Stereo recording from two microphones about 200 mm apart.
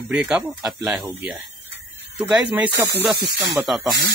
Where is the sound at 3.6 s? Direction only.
Centre (ahead or behind).